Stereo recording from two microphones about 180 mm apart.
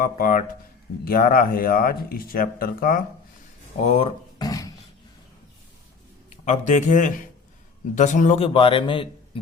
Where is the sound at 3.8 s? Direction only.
35° left (ahead or behind).